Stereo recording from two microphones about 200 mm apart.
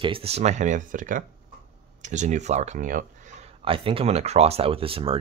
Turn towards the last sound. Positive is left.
turn(degrees=-25)  # may be behind; listen again after turning